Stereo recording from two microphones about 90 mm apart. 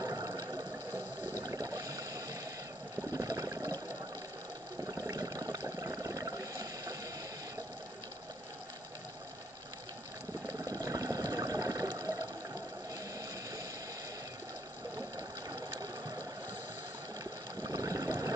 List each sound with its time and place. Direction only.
0.0 s a sound: 40° right (ahead or behind)
3.1 s water: 40° right (ahead or behind)
4.8 s water: 40° right (ahead or behind)
10.6 s water: 40° right (ahead or behind)
15.0 s sewing machine: 40° right (ahead or behind)
17.6 s water: 40° right (ahead or behind)